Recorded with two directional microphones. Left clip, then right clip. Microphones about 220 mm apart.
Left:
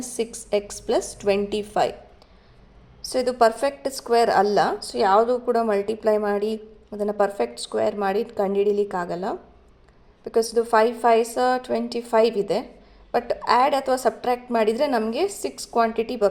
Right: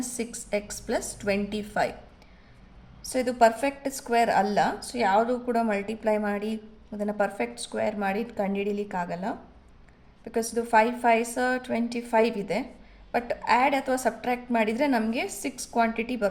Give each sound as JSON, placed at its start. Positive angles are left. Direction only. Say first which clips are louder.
{"t": 0.0, "sound": "a woman's voice", "louder": "left 6 dB", "side_deg": 20}
{"t": 3.1, "sound": "a woman's voice", "louder": "left 3 dB", "side_deg": 25}